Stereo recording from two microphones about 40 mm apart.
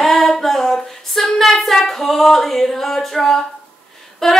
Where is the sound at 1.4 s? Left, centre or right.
Centre.